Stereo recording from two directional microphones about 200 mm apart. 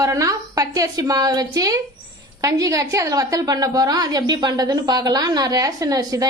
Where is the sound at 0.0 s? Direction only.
15° right (ahead or behind).